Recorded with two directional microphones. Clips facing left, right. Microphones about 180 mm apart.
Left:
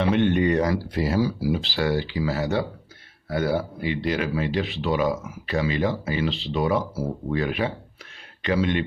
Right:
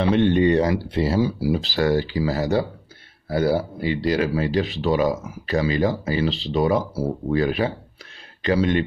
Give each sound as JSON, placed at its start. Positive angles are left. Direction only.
{"t": 0.0, "sound": "speech", "side_deg": -35}